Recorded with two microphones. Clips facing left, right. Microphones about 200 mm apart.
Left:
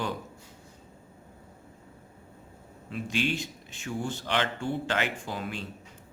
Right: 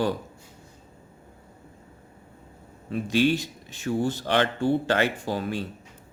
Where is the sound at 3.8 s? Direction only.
40° right (ahead or behind).